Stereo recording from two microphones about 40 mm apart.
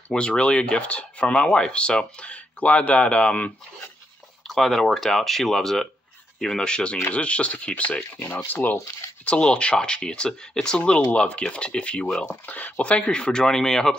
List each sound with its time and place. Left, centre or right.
0.1 s speech: left
1.3 s speech: centre; by 3.5 s left
4.6 s speech: centre
6.6 s speech: left
8.5 s speech: left
9.2 s speech: left
10.8 s speech: left
12.3 s speech: left; by 13.9 s centre